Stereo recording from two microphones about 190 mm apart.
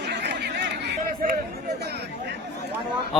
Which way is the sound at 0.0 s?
65° right (ahead or behind).